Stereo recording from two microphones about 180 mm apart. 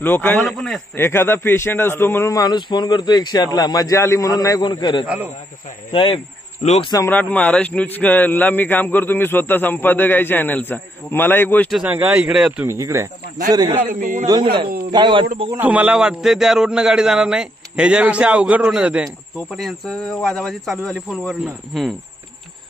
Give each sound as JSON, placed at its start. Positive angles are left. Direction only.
{"t": 0.0, "sound": "a man's voice", "side_deg": 10}
{"t": 0.9, "sound": "speech", "side_deg": 15}
{"t": 5.0, "sound": "speech", "side_deg": -10}
{"t": 5.9, "sound": "speech", "side_deg": 30}
{"t": 6.9, "sound": "a man's voice", "side_deg": 15}
{"t": 11.7, "sound": "a man's voice", "side_deg": -10}
{"t": 12.6, "sound": "speech", "side_deg": -15}
{"t": 13.9, "sound": "speech", "side_deg": -50}
{"t": 14.2, "sound": "speech", "side_deg": -20}
{"t": 15.5, "sound": "a man's voice", "side_deg": -10}